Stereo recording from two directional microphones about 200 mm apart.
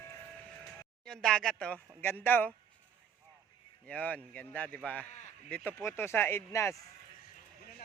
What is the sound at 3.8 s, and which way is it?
Speech, 10° left (ahead or behind).